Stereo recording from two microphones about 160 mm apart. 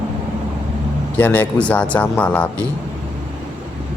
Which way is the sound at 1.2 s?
10° left (ahead or behind).